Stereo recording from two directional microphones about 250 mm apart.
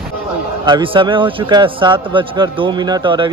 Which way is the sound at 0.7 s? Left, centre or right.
Centre.